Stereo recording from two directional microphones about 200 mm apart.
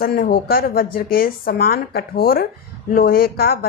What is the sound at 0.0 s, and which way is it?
Speech, 45° left (ahead or behind).